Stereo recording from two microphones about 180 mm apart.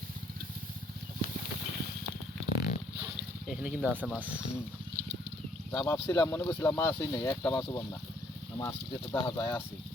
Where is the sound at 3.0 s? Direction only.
5° right (ahead or behind).